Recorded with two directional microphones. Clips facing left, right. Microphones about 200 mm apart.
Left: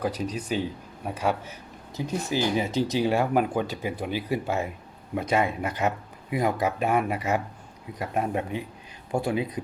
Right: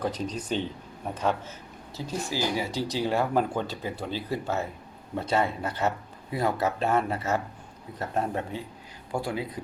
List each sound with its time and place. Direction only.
0.0 s speech: 10° left (ahead or behind)